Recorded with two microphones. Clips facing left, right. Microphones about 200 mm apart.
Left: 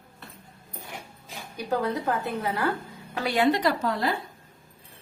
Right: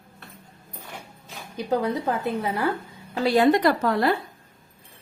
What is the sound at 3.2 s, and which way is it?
Speech, 35° right (ahead or behind).